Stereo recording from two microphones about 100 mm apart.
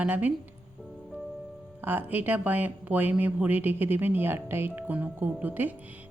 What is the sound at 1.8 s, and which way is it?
A woman's voice, 20° right (ahead or behind).